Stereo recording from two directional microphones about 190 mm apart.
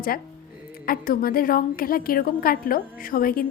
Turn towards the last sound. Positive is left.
turn(degrees=50)  # may be behind; listen again after turning